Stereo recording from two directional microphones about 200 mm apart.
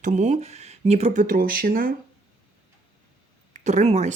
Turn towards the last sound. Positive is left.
turn(degrees=-35)  # may be behind; listen again after turning